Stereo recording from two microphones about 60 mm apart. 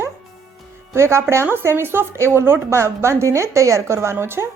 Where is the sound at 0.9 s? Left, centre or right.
Right.